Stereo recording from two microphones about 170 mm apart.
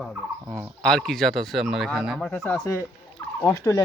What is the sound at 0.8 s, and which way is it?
Speech, 5° left (ahead or behind).